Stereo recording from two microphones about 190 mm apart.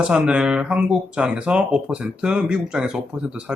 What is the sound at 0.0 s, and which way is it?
Speech, 5° right (ahead or behind).